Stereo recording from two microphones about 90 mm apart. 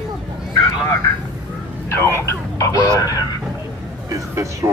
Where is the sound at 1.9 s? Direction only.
30° left (ahead or behind).